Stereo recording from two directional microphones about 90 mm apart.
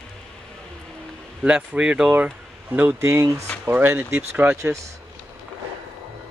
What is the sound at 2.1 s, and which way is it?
Speech, 20° right (ahead or behind).